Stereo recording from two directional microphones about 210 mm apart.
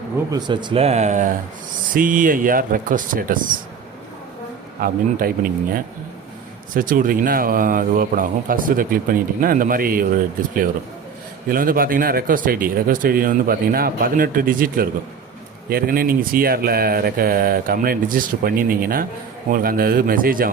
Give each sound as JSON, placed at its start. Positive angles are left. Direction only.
{"t": 0.3, "sound": "speech", "side_deg": -20}
{"t": 4.8, "sound": "speech", "side_deg": -45}
{"t": 11.4, "sound": "speech", "side_deg": -40}